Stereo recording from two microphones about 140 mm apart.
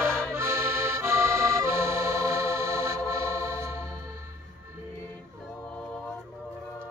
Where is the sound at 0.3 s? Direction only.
20° right (ahead or behind).